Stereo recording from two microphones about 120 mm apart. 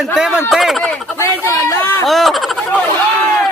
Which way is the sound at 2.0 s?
Centre (ahead or behind).